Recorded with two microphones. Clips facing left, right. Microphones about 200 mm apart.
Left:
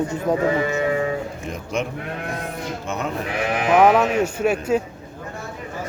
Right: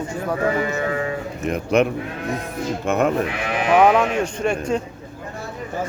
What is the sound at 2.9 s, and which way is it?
Speech, 55° right (ahead or behind).